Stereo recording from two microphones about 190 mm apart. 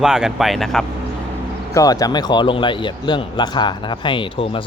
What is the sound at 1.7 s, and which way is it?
Speech, 20° left (ahead or behind).